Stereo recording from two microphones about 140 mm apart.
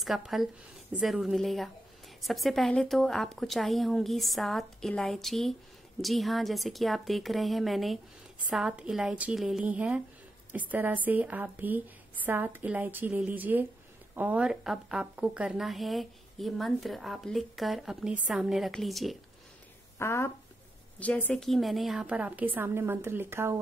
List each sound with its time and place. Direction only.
0.0 s a woman's voice: centre (ahead or behind)
20.0 s a woman's voice: 20° left (ahead or behind); by 23.6 s 15° right (ahead or behind)